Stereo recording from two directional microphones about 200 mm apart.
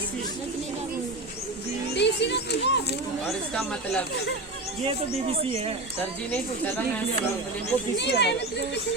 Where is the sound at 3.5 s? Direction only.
5° left (ahead or behind).